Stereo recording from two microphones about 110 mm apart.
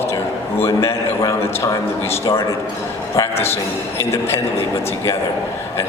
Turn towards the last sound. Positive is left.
turn(degrees=25)  # may be behind; listen again after turning